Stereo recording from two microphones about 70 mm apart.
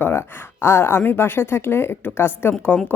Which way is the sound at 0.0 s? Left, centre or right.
Left.